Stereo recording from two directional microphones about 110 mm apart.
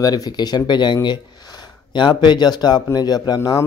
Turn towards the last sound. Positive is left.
turn(degrees=35)  # may be behind; listen again after turning